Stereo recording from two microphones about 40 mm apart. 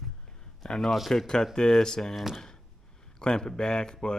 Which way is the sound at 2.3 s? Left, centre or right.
Centre.